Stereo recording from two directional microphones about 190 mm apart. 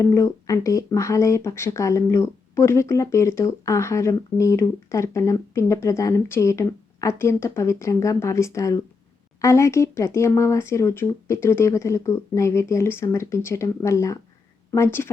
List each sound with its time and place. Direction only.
0.0 s speech: 15° left (ahead or behind)